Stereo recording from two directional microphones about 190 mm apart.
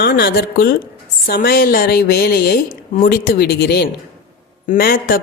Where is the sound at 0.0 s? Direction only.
55° left (ahead or behind).